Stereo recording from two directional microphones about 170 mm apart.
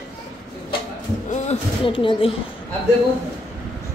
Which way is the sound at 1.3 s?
45° left (ahead or behind).